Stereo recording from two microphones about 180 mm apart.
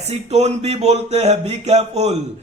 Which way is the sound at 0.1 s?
35° right (ahead or behind).